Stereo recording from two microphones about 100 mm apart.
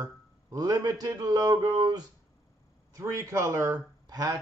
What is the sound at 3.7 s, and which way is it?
Speech, 40° right (ahead or behind).